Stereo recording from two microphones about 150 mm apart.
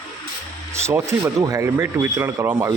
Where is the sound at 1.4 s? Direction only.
20° right (ahead or behind).